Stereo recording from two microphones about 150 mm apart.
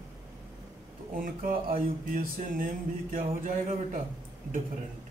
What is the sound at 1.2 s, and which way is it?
Speech, 70° right (ahead or behind).